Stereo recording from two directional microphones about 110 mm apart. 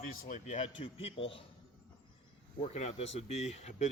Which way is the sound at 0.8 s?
55° left (ahead or behind).